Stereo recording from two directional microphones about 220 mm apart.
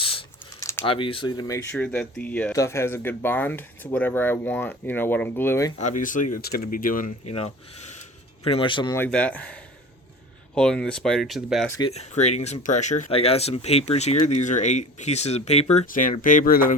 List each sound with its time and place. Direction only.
0.0 s typing: 25° left (ahead or behind)
0.9 s speech: 25° left (ahead or behind)
1.7 s speech: 5° left (ahead or behind)
5.8 s speech: 35° left (ahead or behind)
9.0 s speech: 5° left (ahead or behind)
11.8 s speech: 30° left (ahead or behind)